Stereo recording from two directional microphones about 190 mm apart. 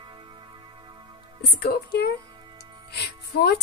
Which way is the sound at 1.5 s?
60° left (ahead or behind).